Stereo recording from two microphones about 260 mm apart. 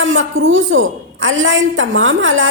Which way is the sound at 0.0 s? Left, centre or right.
Right.